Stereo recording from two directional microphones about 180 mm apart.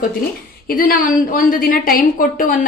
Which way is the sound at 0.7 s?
55° left (ahead or behind).